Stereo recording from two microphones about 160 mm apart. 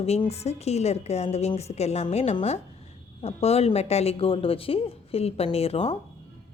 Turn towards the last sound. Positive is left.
turn(degrees=40)  # may be behind; listen again after turning